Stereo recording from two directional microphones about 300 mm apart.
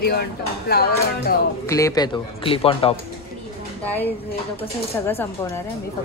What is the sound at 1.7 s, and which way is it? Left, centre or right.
Speech, centre.